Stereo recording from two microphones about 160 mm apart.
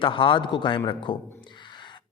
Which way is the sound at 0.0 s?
30° left (ahead or behind).